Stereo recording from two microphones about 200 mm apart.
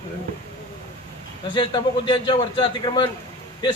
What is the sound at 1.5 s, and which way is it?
A man's voice, 25° left (ahead or behind).